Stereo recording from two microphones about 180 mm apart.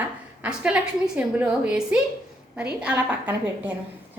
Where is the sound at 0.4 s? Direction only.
5° right (ahead or behind).